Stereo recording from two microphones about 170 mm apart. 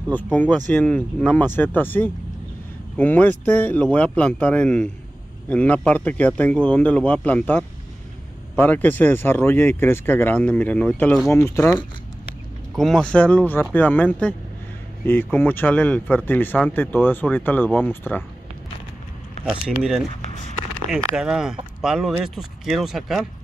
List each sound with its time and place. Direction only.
0.1 s speech: 10° left (ahead or behind)
8.6 s speech: 10° left (ahead or behind)
12.7 s speech: centre (ahead or behind)
19.4 s speech: centre (ahead or behind)